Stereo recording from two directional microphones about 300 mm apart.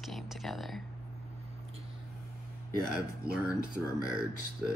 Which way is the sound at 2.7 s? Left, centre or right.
Right.